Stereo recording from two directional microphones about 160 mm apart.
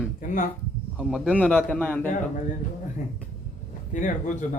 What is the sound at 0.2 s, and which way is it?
Speech, 55° left (ahead or behind).